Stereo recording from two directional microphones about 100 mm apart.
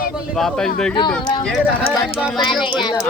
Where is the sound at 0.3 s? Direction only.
5° left (ahead or behind).